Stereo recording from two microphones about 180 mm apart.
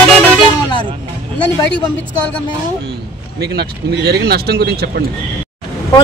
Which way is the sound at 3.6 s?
65° right (ahead or behind).